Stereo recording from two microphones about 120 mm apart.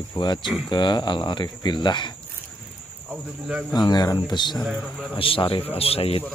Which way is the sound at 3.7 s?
35° left (ahead or behind).